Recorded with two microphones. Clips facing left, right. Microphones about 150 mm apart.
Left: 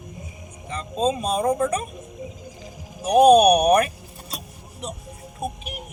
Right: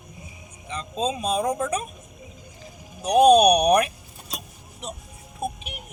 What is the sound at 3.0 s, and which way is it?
Speech, 5° left (ahead or behind).